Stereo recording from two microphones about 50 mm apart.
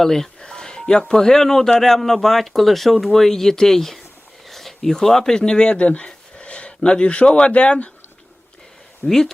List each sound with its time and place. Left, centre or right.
0.0 s speech: centre; by 7.9 s left
9.0 s speech: centre